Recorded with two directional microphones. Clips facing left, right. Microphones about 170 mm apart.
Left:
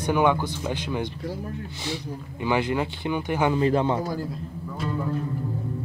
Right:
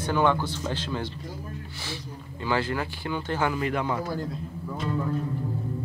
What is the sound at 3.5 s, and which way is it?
Speech, 30° left (ahead or behind).